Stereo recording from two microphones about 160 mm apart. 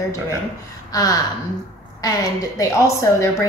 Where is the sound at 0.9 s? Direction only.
25° left (ahead or behind).